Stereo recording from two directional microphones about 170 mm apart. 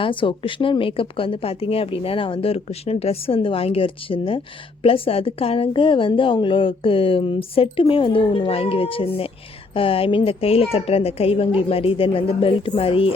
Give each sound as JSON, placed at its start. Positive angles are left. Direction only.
{"t": 0.0, "sound": "a woman's voice", "side_deg": 30}